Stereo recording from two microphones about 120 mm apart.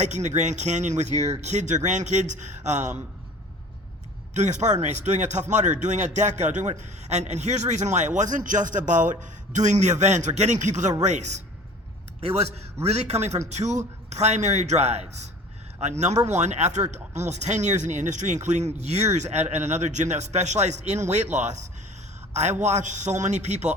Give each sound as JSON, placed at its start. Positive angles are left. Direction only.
{"t": 0.0, "sound": "speech", "side_deg": -80}
{"t": 4.4, "sound": "speech", "side_deg": -80}
{"t": 12.4, "sound": "a man's voice", "side_deg": -60}
{"t": 22.3, "sound": "a sound", "side_deg": -70}
{"t": 22.6, "sound": "speech", "side_deg": -85}